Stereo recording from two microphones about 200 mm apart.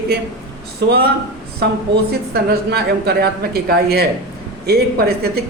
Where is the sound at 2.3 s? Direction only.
55° right (ahead or behind).